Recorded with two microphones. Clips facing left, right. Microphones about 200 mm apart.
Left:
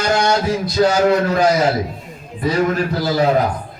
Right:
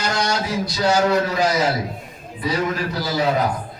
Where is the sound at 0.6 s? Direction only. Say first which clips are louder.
Left 3 dB; 55° left (ahead or behind).